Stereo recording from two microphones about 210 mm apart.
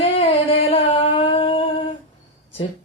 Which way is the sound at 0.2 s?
25° left (ahead or behind).